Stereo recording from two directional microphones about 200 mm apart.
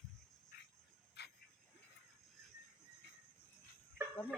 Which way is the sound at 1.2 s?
55° left (ahead or behind).